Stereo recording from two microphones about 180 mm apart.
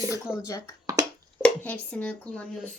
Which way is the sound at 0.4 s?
15° left (ahead or behind).